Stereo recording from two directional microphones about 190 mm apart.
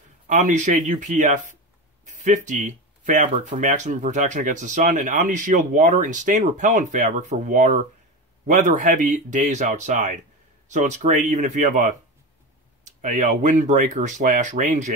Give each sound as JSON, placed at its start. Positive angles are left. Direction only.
{"t": 0.3, "sound": "speech", "side_deg": -40}